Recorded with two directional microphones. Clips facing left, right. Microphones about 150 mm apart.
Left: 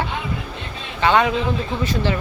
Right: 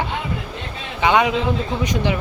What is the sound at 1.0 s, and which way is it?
Speech, 15° right (ahead or behind).